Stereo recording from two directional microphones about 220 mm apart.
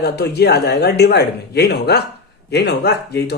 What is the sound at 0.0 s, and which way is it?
A man's voice, 50° left (ahead or behind).